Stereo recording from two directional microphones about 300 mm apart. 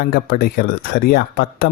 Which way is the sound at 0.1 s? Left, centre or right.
Left.